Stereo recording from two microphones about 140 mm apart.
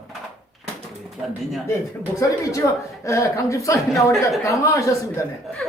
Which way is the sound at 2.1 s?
25° left (ahead or behind).